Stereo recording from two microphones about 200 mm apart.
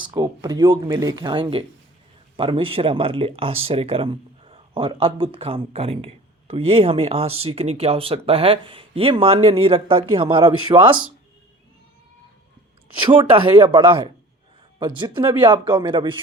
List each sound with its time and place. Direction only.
0.1 s speech: 20° right (ahead or behind)
13.1 s speech: 25° right (ahead or behind)